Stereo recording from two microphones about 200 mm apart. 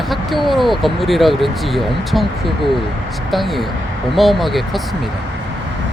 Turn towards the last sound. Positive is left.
turn(degrees=0)  # may be behind; listen again after turning